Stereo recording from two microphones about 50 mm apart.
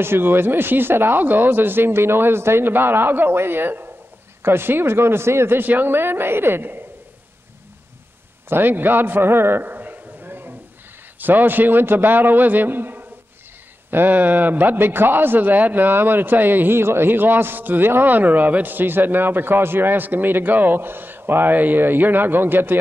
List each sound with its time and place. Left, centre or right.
0.0 s a man's voice: right
5.6 s a man's voice: right
8.5 s a man's voice: right